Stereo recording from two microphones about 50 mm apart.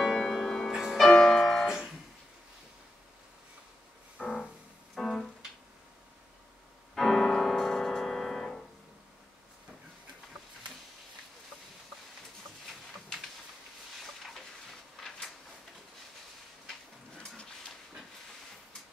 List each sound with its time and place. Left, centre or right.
0.0 s music: centre
1.1 s music: centre
4.2 s music: left
4.9 s keyboard: centre
7.0 s piano: centre
15.0 s a sound: centre